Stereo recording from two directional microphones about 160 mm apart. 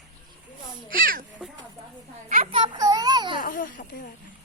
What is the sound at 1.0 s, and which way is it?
Speech, 60° right (ahead or behind).